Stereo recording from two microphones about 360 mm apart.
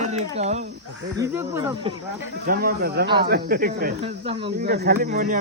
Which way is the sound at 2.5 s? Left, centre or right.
Right.